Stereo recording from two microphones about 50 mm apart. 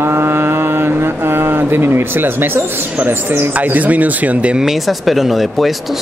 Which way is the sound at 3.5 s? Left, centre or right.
Right.